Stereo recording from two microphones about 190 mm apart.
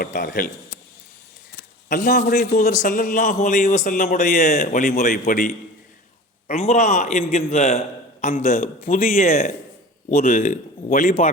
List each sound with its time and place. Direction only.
0.0 s a man's voice: 50° left (ahead or behind)
1.9 s a man's voice: 45° left (ahead or behind)
6.5 s a man's voice: 35° left (ahead or behind)
10.2 s a man's voice: 50° left (ahead or behind)